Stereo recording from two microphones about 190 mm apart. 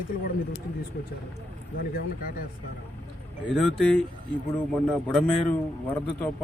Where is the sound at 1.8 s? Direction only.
50° left (ahead or behind).